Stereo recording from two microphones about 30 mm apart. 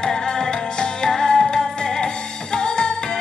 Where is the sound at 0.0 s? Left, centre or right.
Left.